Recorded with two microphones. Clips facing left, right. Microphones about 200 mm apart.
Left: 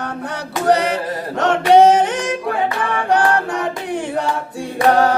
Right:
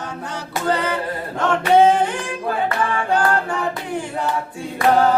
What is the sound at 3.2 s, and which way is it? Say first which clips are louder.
Choir: left 2 dB; 90° left.